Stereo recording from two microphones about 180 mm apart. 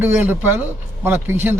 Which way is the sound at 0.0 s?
10° right (ahead or behind).